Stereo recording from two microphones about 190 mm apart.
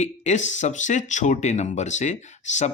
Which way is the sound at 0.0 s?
40° left (ahead or behind).